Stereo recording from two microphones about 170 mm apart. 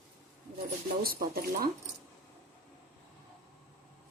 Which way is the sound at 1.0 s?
60° right (ahead or behind).